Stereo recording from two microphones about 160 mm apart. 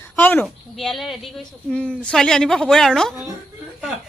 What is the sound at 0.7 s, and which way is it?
Speech, centre (ahead or behind).